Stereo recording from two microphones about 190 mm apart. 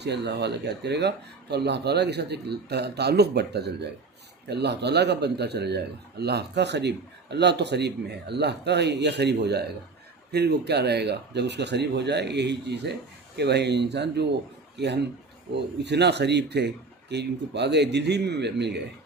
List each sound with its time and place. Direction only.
0.0 s a man's voice: 60° right (ahead or behind)